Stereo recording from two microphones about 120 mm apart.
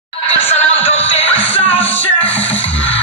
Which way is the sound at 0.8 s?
55° left (ahead or behind).